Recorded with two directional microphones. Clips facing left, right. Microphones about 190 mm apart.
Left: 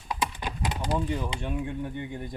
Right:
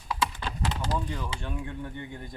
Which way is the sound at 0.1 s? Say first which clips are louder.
Even; 15° left (ahead or behind).